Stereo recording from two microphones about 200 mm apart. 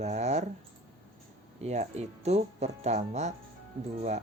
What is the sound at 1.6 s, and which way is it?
Speech, 35° right (ahead or behind).